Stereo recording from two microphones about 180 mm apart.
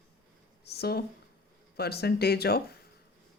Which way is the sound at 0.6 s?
60° left (ahead or behind).